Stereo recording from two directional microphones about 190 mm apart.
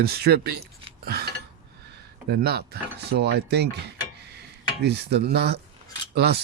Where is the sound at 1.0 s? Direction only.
55° right (ahead or behind).